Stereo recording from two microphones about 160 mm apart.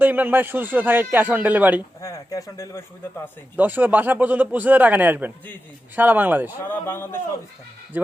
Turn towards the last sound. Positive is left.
turn(degrees=15)  # may be behind; listen again after turning